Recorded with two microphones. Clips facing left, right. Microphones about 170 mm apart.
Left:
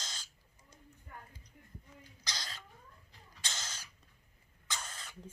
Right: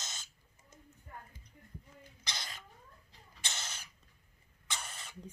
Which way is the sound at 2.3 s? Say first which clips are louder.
Even; 20° right (ahead or behind).